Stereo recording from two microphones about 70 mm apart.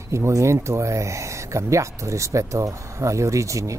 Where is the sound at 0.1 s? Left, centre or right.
Right.